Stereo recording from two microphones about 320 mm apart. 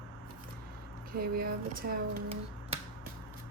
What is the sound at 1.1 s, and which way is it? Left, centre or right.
Speech, right.